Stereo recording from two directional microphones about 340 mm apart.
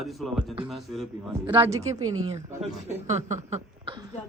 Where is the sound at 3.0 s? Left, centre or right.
Centre.